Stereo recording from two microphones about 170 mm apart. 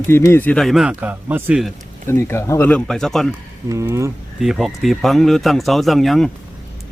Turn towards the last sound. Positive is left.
turn(degrees=0)  # may be behind; listen again after turning